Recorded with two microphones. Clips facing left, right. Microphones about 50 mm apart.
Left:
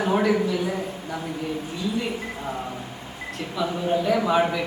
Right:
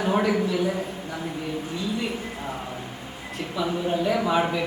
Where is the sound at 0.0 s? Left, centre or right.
Centre.